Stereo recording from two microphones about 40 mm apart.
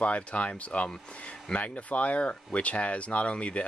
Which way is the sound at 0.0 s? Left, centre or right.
Left.